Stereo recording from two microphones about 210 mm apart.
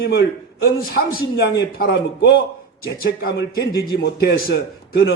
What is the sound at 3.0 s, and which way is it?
A man's voice, 45° left (ahead or behind).